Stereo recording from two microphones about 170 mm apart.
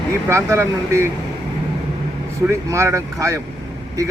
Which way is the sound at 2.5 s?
15° right (ahead or behind).